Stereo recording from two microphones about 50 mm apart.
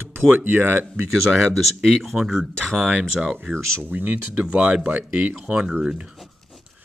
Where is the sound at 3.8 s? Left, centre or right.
Right.